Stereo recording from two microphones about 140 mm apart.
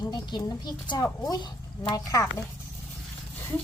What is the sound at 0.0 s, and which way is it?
Speech, 30° left (ahead or behind).